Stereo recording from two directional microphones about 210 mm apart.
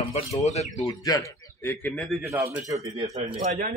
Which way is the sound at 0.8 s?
15° left (ahead or behind).